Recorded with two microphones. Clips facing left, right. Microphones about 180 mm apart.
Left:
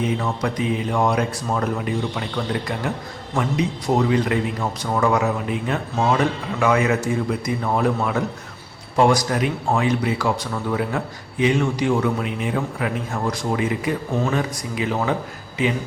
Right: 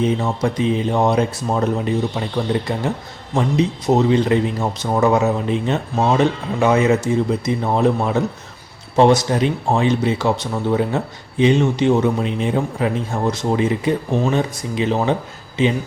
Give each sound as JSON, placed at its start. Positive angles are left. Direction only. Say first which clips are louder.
{"t": 0.0, "sound": "speech", "louder": "right 4 dB", "side_deg": -30}